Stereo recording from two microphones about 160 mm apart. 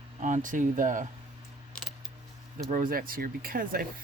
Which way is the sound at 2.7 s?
60° right (ahead or behind).